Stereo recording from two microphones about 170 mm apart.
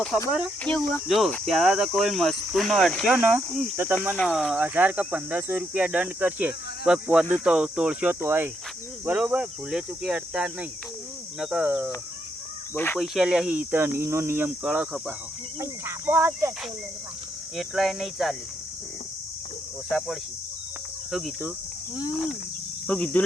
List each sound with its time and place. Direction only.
0.6 s speech: 5° left (ahead or behind)
3.2 s speech: 10° right (ahead or behind)
12.7 s speech: 10° left (ahead or behind)
13.0 s speech: 5° right (ahead or behind)
15.6 s speech: 15° right (ahead or behind)
17.6 s speech: centre (ahead or behind)
19.9 s speech: centre (ahead or behind)